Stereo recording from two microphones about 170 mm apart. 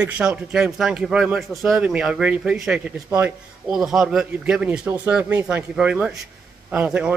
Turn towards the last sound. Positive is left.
turn(degrees=-10)  # may be behind; listen again after turning